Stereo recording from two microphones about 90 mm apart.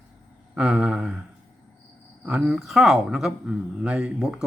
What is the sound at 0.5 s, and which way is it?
Speech, 10° right (ahead or behind).